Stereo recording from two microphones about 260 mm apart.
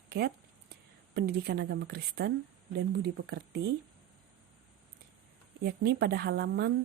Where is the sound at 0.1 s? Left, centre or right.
Right.